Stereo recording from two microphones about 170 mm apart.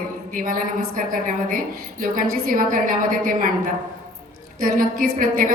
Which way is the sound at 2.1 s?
55° right (ahead or behind).